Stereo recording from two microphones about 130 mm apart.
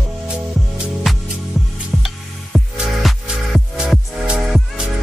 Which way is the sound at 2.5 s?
Centre (ahead or behind).